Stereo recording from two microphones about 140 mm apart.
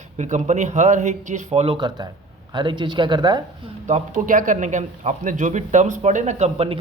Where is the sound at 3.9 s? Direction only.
70° right (ahead or behind); by 6.8 s 45° right (ahead or behind).